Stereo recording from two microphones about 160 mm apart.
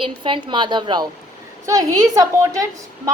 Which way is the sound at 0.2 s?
30° right (ahead or behind).